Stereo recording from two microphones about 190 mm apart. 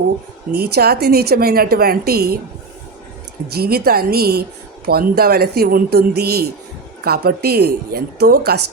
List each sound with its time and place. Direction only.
0.5 s a woman's voice: 55° right (ahead or behind)
3.5 s a woman's voice: 55° right (ahead or behind)